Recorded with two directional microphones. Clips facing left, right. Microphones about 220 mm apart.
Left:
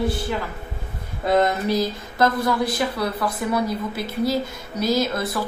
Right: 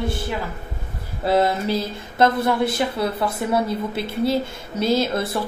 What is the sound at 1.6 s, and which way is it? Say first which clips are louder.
A woman's voice: left 2 dB; 25° right (ahead or behind).